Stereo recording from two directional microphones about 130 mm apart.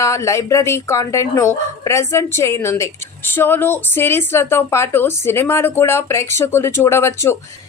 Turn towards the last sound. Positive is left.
turn(degrees=20)  # may be behind; listen again after turning